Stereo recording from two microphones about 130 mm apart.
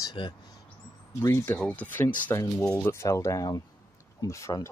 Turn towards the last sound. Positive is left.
turn(degrees=25)  # may be behind; listen again after turning